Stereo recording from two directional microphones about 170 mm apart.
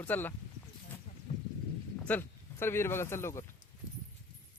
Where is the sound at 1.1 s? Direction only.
50° left (ahead or behind).